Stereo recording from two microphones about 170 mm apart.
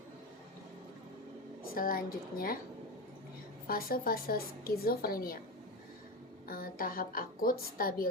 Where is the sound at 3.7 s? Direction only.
60° left (ahead or behind).